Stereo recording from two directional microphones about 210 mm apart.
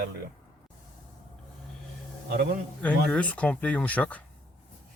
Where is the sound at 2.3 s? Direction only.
45° right (ahead or behind).